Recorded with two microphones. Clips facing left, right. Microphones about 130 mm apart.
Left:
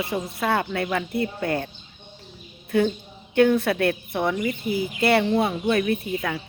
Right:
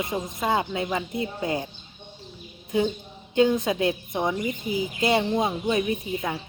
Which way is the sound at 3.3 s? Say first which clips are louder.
Left 2 dB; 15° right (ahead or behind).